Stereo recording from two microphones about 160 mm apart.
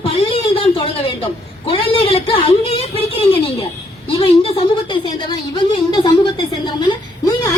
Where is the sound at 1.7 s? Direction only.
35° left (ahead or behind).